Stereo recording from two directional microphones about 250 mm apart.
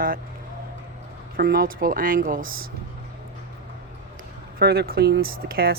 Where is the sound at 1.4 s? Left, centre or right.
Right.